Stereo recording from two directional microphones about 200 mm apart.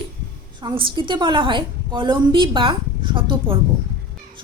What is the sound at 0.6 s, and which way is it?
A woman's voice, 25° right (ahead or behind).